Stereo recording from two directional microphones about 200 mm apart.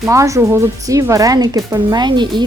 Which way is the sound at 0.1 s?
15° right (ahead or behind).